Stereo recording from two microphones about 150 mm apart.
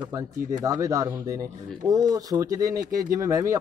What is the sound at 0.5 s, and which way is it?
Speech, 20° right (ahead or behind).